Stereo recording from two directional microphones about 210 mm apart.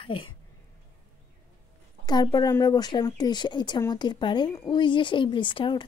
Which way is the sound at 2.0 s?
20° left (ahead or behind).